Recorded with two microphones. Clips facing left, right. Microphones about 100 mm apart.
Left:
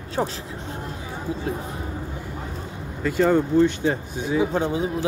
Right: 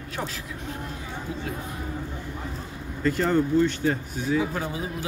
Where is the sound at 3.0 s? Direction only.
10° left (ahead or behind).